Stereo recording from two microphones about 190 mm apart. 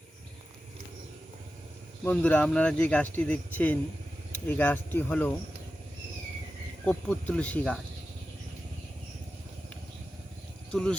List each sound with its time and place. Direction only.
2.0 s speech: 10° left (ahead or behind)
6.8 s speech: 5° left (ahead or behind)
10.7 s speech: 5° left (ahead or behind)